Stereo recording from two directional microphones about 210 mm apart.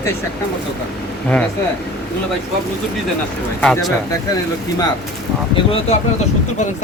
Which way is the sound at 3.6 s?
Centre (ahead or behind).